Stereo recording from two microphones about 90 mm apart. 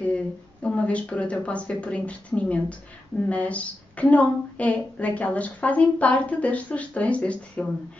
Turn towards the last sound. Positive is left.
turn(degrees=15)  # may be behind; listen again after turning